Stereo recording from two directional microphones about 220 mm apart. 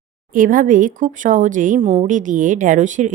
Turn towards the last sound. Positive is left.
turn(degrees=-35)  # may be behind; listen again after turning